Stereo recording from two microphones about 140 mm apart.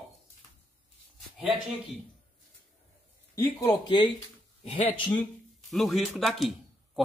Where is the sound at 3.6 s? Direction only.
30° left (ahead or behind).